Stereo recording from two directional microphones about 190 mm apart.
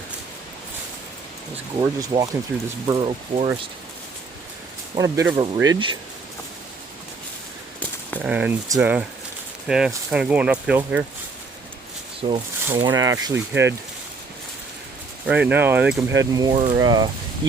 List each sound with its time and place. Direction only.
1.8 s speech: 20° right (ahead or behind)
4.9 s speech: 15° right (ahead or behind)
8.2 s speech: 5° right (ahead or behind)
12.2 s speech: 35° right (ahead or behind)
12.7 s speech: 20° right (ahead or behind)
15.3 s speech: 5° right (ahead or behind); by 17.1 s 20° right (ahead or behind)